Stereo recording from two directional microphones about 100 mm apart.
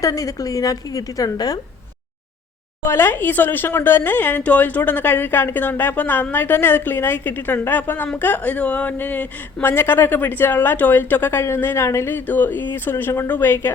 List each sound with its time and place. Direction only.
0.0 s a woman's voice: 35° left (ahead or behind)
2.8 s a woman's voice: 25° left (ahead or behind)